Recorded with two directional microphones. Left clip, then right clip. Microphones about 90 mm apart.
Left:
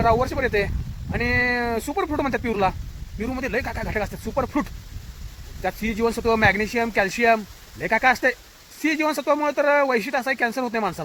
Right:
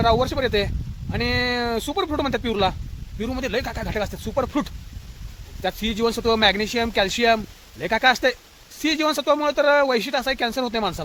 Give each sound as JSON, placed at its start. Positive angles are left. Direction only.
{"t": 0.0, "sound": "speech", "side_deg": -45}
{"t": 5.6, "sound": "speech", "side_deg": -40}
{"t": 6.0, "sound": "speech", "side_deg": -60}
{"t": 6.4, "sound": "speech", "side_deg": -35}
{"t": 8.8, "sound": "speech", "side_deg": -55}
{"t": 9.2, "sound": "speech", "side_deg": -40}